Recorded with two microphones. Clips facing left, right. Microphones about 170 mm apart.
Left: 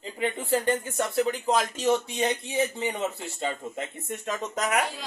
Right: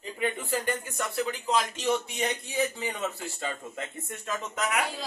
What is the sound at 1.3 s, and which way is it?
Speech, 45° left (ahead or behind).